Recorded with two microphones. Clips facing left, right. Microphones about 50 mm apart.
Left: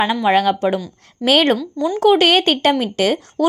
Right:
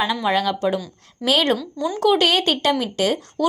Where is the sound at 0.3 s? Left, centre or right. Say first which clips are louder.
Left 6 dB; left.